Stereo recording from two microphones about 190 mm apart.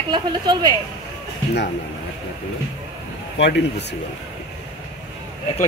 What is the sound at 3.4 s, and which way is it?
Speech, 65° left (ahead or behind).